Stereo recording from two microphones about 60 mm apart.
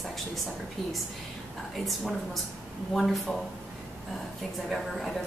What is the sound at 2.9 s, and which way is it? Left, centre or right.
Speech, centre.